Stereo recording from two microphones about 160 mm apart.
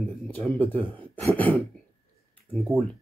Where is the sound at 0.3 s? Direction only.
10° left (ahead or behind).